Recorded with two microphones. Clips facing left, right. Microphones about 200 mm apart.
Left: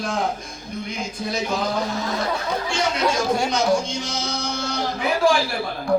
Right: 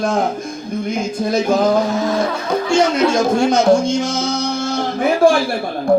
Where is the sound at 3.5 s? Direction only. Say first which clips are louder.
Right 8 dB; 50° right (ahead or behind).